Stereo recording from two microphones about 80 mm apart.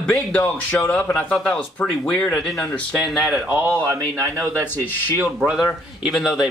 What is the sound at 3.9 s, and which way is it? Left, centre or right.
Speech, right.